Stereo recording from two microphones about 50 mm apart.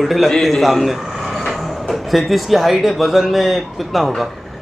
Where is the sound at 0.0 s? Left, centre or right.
Centre.